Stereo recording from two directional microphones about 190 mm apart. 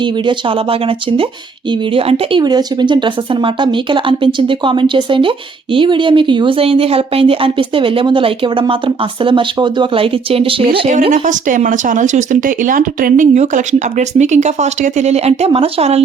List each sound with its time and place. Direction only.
0.0 s speech: 25° right (ahead or behind)